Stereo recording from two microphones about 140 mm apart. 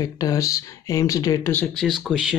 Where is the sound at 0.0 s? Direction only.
25° left (ahead or behind).